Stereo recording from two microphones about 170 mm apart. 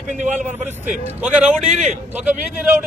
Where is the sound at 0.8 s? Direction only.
10° right (ahead or behind).